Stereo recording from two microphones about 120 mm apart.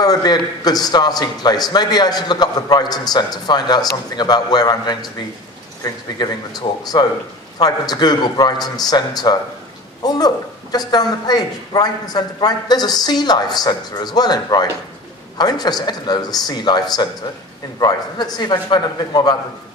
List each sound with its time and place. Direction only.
0.0 s a man's voice: 35° left (ahead or behind)
6.1 s a man's voice: 35° left (ahead or behind)